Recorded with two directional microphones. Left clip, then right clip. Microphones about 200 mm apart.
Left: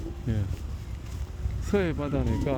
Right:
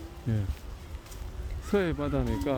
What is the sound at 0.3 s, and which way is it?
Speech, 15° left (ahead or behind).